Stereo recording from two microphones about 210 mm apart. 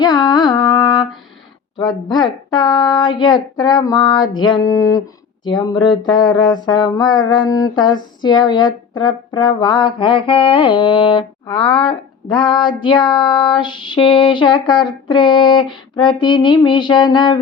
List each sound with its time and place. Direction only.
0.0 s carnatic music: 20° left (ahead or behind)
1.8 s music: 20° left (ahead or behind)